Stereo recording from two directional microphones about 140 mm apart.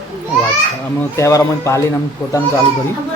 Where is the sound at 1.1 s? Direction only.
20° left (ahead or behind).